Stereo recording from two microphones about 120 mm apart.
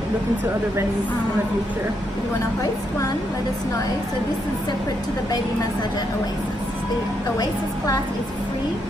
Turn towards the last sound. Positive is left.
turn(degrees=30)  # may be behind; listen again after turning